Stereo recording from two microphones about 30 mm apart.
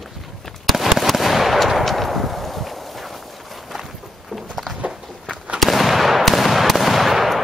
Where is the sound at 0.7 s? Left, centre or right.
Centre.